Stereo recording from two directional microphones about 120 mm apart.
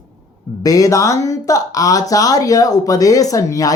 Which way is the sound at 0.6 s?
30° left (ahead or behind).